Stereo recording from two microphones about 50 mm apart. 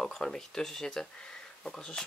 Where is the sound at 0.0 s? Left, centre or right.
Centre.